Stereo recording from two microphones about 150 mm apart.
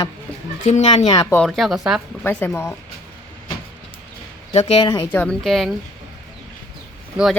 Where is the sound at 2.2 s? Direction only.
15° left (ahead or behind).